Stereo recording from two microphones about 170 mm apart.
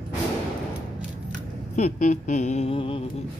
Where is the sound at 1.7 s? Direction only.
45° left (ahead or behind).